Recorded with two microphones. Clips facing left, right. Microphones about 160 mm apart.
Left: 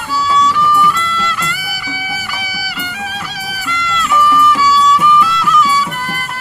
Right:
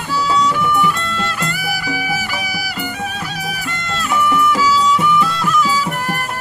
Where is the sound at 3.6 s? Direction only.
50° right (ahead or behind).